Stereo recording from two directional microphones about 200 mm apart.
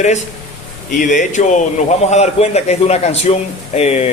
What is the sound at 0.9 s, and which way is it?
Speech, 40° left (ahead or behind).